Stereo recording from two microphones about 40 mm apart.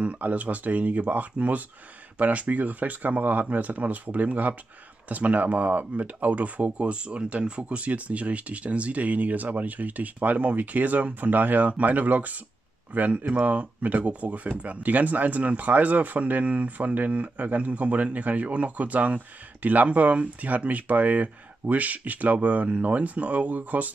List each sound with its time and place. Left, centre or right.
0.0 s speech: right